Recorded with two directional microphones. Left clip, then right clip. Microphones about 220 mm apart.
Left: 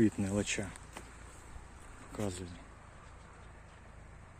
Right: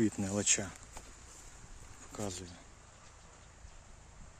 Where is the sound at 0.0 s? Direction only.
15° right (ahead or behind).